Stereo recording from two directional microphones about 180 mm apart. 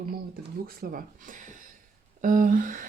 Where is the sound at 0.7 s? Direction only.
55° right (ahead or behind).